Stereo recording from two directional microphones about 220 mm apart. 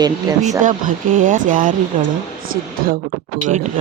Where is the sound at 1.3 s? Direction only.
35° right (ahead or behind).